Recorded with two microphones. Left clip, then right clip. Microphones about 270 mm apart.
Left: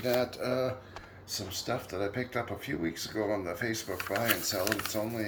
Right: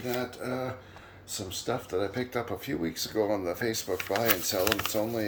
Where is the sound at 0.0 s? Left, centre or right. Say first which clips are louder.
Left 4 dB; centre.